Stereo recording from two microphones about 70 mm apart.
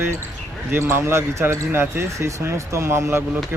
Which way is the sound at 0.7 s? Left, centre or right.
Right.